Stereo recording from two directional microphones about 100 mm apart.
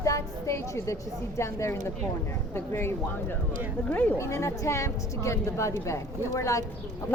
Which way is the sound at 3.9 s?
15° left (ahead or behind).